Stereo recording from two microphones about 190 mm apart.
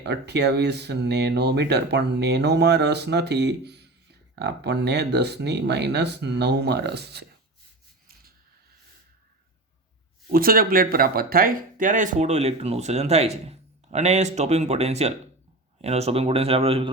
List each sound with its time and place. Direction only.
0.0 s speech: 60° right (ahead or behind)
10.3 s speech: 50° right (ahead or behind); by 16.9 s 30° right (ahead or behind)